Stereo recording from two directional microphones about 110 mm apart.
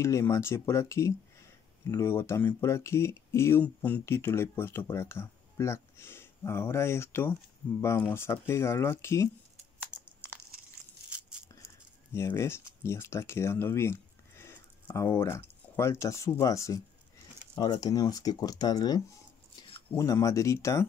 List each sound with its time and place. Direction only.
0.0 s speech: 25° left (ahead or behind)
11.1 s a sound: 10° right (ahead or behind)
12.1 s speech: 25° left (ahead or behind)